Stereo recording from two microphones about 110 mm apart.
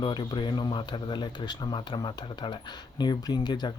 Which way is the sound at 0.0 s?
45° left (ahead or behind).